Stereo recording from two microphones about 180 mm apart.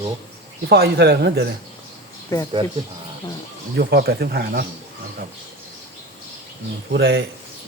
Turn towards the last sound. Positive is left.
turn(degrees=-65)  # may be behind; listen again after turning